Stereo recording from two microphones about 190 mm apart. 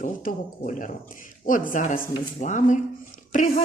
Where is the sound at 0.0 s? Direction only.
45° left (ahead or behind).